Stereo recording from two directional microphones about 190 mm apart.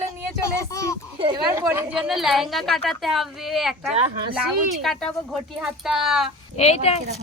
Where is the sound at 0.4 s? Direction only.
15° left (ahead or behind).